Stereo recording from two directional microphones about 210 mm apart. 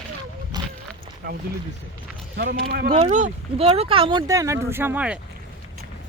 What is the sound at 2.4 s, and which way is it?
Speech, 45° right (ahead or behind).